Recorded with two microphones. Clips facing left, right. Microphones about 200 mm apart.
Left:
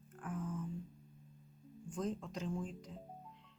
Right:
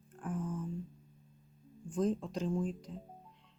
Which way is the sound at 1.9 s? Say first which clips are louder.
Right 7 dB; 30° right (ahead or behind).